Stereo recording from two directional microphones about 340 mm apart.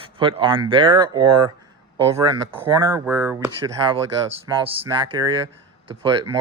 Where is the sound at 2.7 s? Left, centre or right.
Centre.